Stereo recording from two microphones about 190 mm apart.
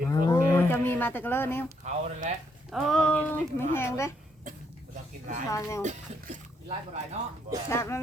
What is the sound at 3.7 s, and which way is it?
Livestock, 15° left (ahead or behind).